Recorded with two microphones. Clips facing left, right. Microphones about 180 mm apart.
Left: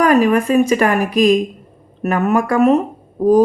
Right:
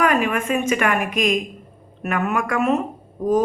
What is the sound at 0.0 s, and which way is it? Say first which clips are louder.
A woman's voice: left 7 dB; 35° left (ahead or behind).